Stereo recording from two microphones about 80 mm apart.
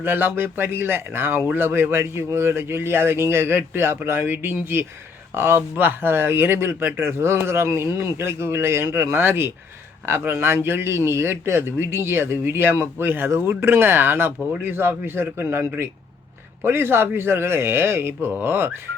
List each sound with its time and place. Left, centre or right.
0.0 s speech: right